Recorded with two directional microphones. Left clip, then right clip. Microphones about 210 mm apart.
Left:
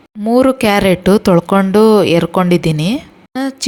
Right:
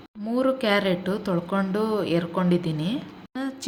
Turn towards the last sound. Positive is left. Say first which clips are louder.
# left 12 dB
turn(degrees=45)  # may be behind; listen again after turning